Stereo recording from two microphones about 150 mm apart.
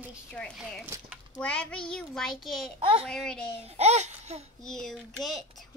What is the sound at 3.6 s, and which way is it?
Speech, 45° right (ahead or behind).